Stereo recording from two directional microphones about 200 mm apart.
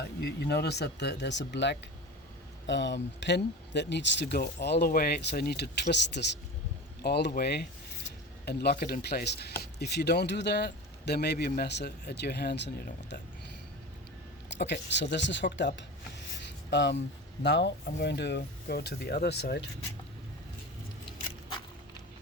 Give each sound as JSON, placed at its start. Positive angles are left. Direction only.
{"t": 0.2, "sound": "a man's voice", "side_deg": 55}
{"t": 14.5, "sound": "speech", "side_deg": 60}
{"t": 16.4, "sound": "a sound", "side_deg": 60}
{"t": 17.4, "sound": "speech", "side_deg": 60}